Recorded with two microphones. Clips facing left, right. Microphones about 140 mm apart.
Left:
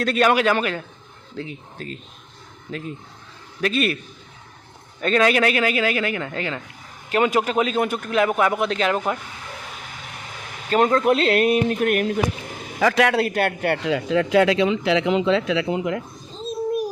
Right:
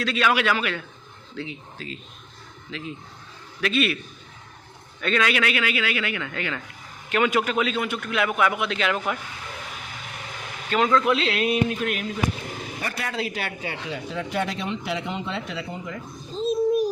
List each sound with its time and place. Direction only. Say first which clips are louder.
0.0 s a man's voice: left 5 dB; 50° left (ahead or behind)
4.9 s a man's voice: left 5 dB; 40° left (ahead or behind)
10.7 s speech: left 3 dB; 45° left (ahead or behind); by 12.2 s 60° left (ahead or behind)
12.8 s a man's voice: left 12 dB; 90° left; by 16.0 s 70° left (ahead or behind)